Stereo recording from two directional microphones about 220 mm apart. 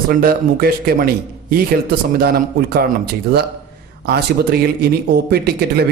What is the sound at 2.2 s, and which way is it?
A man's voice, 45° right (ahead or behind).